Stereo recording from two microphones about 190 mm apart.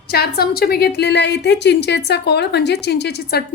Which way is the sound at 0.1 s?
55° left (ahead or behind).